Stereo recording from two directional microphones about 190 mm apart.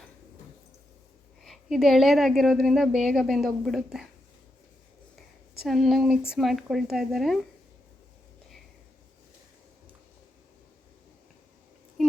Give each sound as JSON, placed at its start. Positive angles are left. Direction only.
{"t": 1.5, "sound": "speech", "side_deg": 0}
{"t": 5.6, "sound": "speech", "side_deg": 0}
{"t": 12.0, "sound": "a sound", "side_deg": 0}